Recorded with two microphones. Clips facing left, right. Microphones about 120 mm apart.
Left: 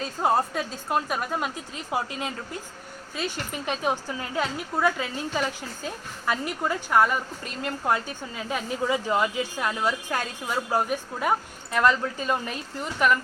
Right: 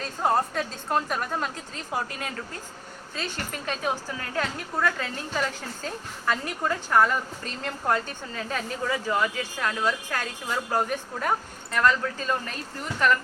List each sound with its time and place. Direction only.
0.0 s a woman's voice: 5° left (ahead or behind)